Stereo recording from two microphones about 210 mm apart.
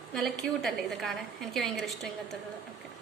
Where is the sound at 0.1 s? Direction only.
Centre (ahead or behind).